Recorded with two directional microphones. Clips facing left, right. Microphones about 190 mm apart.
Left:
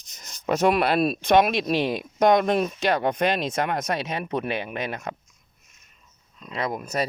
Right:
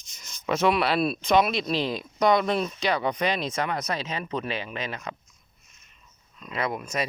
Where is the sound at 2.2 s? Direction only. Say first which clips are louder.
Left 3 dB; 50° left (ahead or behind).